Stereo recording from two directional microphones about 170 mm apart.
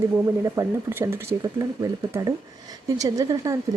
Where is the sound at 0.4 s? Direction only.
15° right (ahead or behind).